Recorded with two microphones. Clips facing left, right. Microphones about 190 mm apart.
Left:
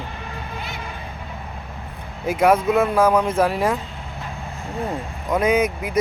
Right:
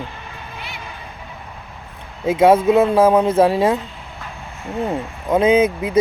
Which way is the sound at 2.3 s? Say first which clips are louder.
Right 4 dB; 25° right (ahead or behind).